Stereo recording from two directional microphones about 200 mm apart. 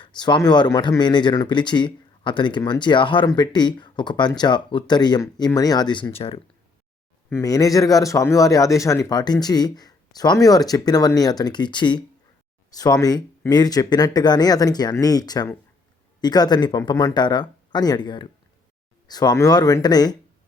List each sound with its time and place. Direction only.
0.0 s speech: 20° left (ahead or behind)
7.3 s speech: 15° left (ahead or behind)